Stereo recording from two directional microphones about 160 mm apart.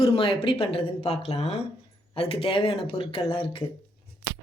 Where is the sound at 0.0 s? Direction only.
35° left (ahead or behind).